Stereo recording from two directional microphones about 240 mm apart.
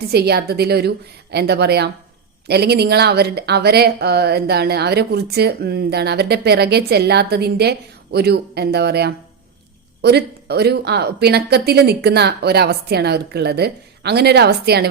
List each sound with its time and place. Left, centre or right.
0.1 s a woman's voice: right